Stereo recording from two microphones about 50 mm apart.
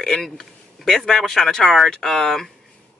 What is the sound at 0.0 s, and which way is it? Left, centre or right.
A man's voice, centre.